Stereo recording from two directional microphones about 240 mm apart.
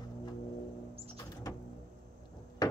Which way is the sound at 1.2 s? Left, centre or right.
Centre.